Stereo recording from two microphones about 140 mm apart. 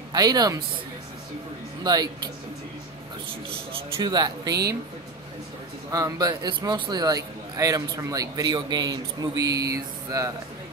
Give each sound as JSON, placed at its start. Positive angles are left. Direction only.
{"t": 0.1, "sound": "a man's voice", "side_deg": -30}
{"t": 1.8, "sound": "a man's voice", "side_deg": -30}
{"t": 3.3, "sound": "a man's voice", "side_deg": -40}
{"t": 5.9, "sound": "a man's voice", "side_deg": -25}